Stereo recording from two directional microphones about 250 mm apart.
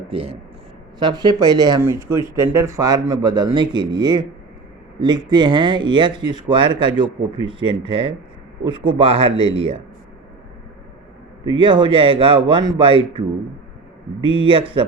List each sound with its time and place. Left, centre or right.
0.1 s speech: right
11.4 s speech: centre